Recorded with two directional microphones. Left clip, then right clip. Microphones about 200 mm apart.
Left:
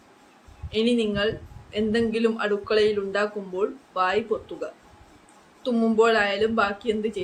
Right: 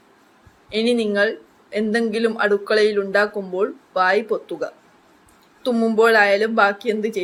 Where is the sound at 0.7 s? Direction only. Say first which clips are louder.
Right 5 dB; 30° right (ahead or behind).